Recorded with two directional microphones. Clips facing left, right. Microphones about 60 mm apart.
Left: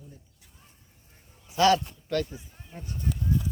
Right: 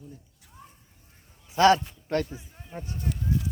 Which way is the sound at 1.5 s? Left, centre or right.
Right.